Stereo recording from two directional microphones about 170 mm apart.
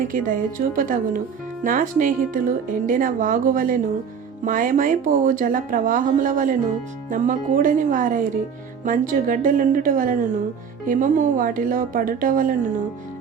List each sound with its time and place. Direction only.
0.1 s speech: 50° right (ahead or behind)